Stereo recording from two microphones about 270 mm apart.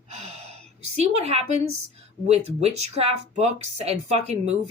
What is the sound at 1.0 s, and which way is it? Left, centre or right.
A woman's voice, right.